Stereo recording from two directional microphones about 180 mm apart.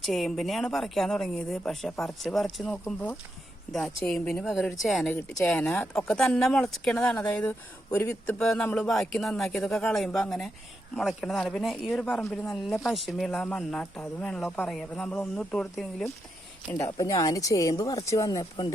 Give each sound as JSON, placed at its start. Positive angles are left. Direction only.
{"t": 0.0, "sound": "speech", "side_deg": 0}
{"t": 16.7, "sound": "speech", "side_deg": 20}